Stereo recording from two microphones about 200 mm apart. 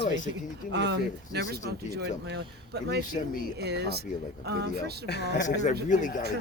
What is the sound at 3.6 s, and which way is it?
Speech, 55° right (ahead or behind).